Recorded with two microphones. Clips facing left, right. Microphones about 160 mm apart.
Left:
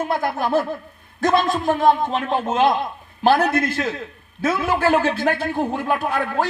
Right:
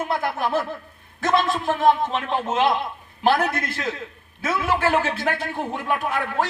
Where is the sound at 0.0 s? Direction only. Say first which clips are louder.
Left 2 dB; 35° left (ahead or behind).